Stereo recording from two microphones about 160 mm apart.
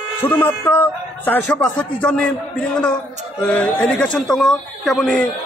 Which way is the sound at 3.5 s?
10° left (ahead or behind).